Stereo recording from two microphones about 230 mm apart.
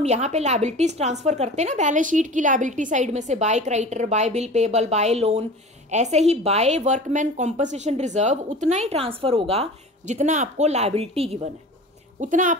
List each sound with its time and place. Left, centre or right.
0.0 s a woman's voice: right